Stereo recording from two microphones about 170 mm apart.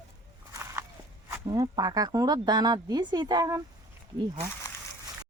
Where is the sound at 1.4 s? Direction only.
25° right (ahead or behind).